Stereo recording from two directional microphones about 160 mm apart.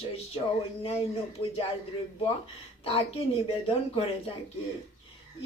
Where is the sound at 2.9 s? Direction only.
35° left (ahead or behind).